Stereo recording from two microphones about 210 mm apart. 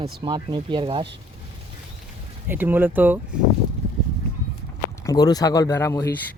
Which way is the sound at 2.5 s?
10° right (ahead or behind).